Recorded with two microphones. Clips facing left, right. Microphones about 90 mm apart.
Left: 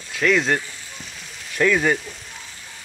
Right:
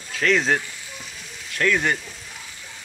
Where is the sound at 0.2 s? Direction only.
Centre (ahead or behind).